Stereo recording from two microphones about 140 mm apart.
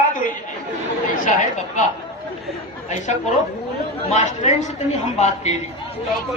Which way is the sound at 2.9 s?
60° left (ahead or behind).